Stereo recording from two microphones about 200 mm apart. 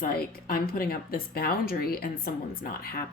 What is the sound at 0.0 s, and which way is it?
Speech, 45° left (ahead or behind).